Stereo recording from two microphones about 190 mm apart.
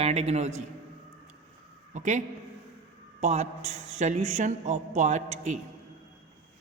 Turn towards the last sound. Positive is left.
turn(degrees=-40)  # may be behind; listen again after turning